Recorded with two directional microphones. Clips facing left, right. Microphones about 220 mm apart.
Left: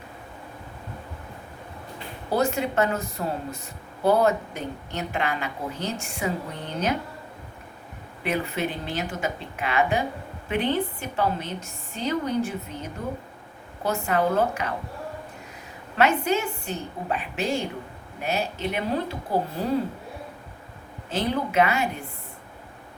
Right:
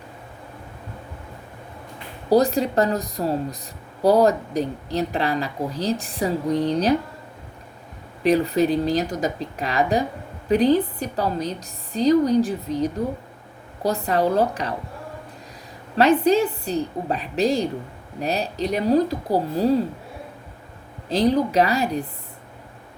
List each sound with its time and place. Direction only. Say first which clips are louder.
2.3 s a woman's voice: right 6 dB; 35° right (ahead or behind)
8.2 s a woman's voice: right 9 dB; 35° right (ahead or behind)
16.0 s a woman's voice: right 6 dB; 35° right (ahead or behind)
21.1 s a woman's voice: right 7 dB; 35° right (ahead or behind)